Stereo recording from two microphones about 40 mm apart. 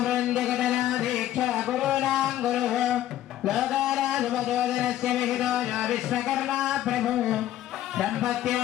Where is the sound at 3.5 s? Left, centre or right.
Centre.